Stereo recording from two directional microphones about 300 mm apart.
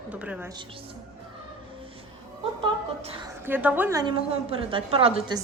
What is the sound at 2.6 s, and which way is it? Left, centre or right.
Speech, centre.